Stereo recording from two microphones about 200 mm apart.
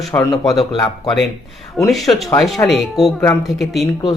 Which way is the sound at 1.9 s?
Centre (ahead or behind).